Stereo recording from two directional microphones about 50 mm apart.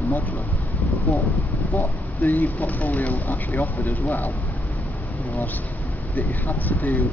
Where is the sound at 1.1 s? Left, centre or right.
Left.